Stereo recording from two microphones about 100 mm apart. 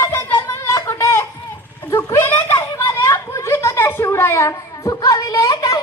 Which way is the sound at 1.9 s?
40° left (ahead or behind).